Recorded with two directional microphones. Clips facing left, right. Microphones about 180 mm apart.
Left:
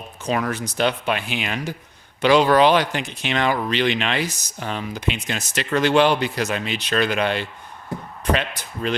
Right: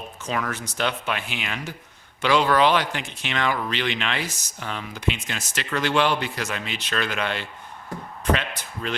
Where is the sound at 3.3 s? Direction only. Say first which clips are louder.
Left 4 dB; 35° left (ahead or behind); by 6.1 s 20° left (ahead or behind).